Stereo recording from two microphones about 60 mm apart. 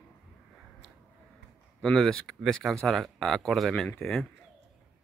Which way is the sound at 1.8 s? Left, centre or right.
Centre.